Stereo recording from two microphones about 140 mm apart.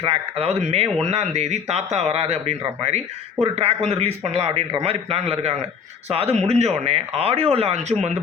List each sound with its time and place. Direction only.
0.0 s speech: 45° right (ahead or behind)